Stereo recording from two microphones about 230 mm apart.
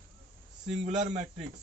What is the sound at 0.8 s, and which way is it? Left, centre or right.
Speech, right.